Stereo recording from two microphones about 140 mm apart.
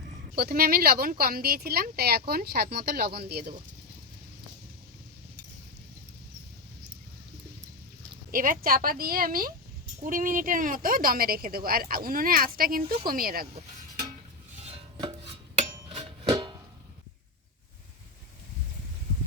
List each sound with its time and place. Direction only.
0.3 s a woman's voice: 90° right
8.3 s a woman's voice: 90° right
10.0 s a woman's voice: 75° right (ahead or behind); by 13.5 s 90° right
15.9 s music: 30° right (ahead or behind)